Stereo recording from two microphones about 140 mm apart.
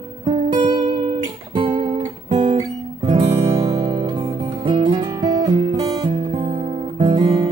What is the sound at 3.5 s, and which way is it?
Music, 40° right (ahead or behind).